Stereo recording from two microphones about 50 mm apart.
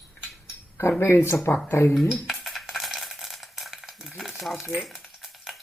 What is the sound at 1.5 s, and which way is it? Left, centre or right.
Speech, left.